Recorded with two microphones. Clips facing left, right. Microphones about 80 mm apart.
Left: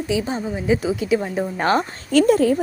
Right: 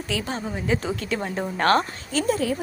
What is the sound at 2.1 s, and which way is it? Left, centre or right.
Speech, left.